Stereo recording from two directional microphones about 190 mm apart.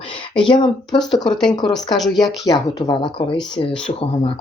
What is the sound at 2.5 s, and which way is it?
Speech, 25° left (ahead or behind).